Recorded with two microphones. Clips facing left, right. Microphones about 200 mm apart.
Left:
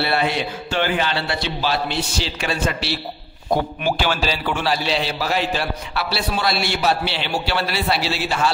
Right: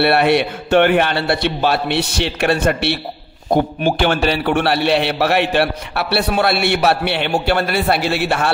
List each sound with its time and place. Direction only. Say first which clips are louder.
0.0 s a man's voice: right 7 dB; 65° right (ahead or behind)